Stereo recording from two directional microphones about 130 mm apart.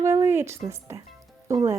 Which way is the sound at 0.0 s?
25° right (ahead or behind).